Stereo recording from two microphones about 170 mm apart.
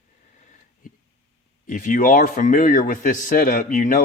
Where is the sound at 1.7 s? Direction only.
50° left (ahead or behind).